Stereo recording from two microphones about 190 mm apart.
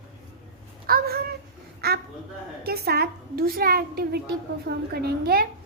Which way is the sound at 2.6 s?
55° right (ahead or behind).